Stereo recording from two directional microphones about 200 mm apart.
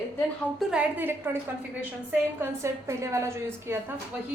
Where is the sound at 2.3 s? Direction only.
15° right (ahead or behind).